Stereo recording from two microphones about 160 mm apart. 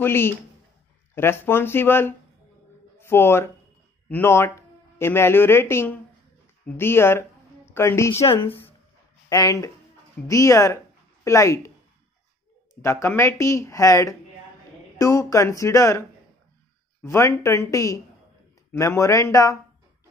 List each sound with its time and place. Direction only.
0.0 s a woman's voice: 15° left (ahead or behind)
12.8 s speech: 15° left (ahead or behind)